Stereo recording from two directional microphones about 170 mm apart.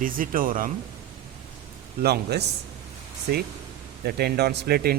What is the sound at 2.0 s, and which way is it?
Speech, 70° right (ahead or behind).